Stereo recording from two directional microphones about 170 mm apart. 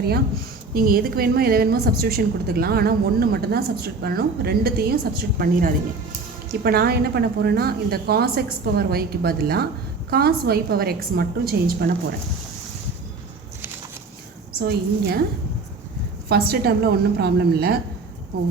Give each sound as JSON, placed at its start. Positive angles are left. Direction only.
{"t": 0.7, "sound": "a woman's voice", "side_deg": -60}
{"t": 14.6, "sound": "a woman's voice", "side_deg": -70}
{"t": 16.3, "sound": "a woman's voice", "side_deg": -70}